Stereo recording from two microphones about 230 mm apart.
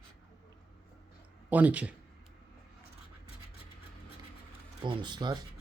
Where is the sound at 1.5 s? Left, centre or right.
Centre.